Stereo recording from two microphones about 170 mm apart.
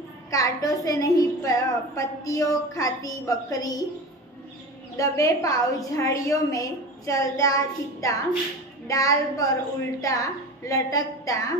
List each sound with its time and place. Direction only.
0.3 s a woman's voice: 20° left (ahead or behind)
4.9 s a woman's voice: 20° left (ahead or behind)